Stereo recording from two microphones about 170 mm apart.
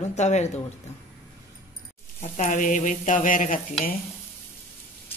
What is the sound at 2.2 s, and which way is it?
Speech, 50° left (ahead or behind).